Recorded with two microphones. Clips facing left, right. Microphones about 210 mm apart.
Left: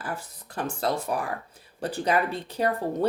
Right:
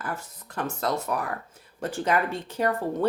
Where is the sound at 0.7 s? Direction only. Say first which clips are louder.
Left 1 dB; 30° left (ahead or behind).